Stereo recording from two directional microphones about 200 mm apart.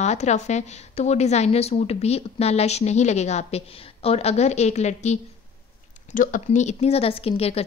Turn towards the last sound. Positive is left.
turn(degrees=30)  # may be behind; listen again after turning